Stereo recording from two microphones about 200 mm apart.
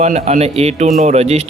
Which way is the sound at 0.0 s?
35° right (ahead or behind).